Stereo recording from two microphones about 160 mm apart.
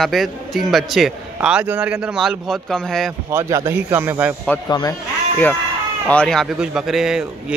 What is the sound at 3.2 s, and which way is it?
Speech, 15° right (ahead or behind).